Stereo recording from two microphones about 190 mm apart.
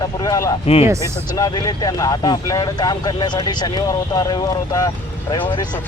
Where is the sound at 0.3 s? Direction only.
15° left (ahead or behind).